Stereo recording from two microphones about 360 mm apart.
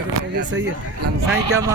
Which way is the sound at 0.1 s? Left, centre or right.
Right.